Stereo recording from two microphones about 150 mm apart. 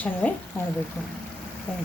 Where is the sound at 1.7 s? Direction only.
10° left (ahead or behind).